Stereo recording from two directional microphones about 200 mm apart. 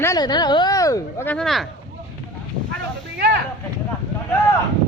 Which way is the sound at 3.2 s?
55° right (ahead or behind).